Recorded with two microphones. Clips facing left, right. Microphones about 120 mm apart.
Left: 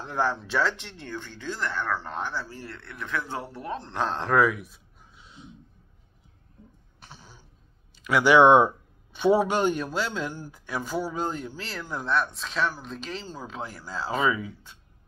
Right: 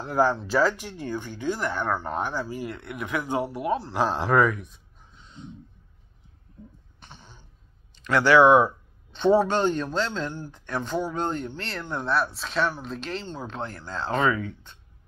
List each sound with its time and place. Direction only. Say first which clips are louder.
0.0 s speech: right 5 dB; centre (ahead or behind)
7.0 s cough: even; 5° left (ahead or behind)
7.9 s speech: even; 10° left (ahead or behind)
9.1 s speech: right 1 dB; 10° left (ahead or behind)